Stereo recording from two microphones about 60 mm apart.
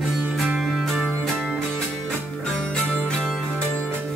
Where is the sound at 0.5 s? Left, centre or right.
Centre.